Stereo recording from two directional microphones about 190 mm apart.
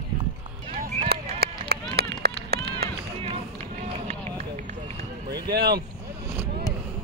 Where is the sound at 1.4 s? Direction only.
55° right (ahead or behind).